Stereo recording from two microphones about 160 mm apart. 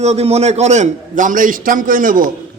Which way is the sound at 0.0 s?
40° right (ahead or behind).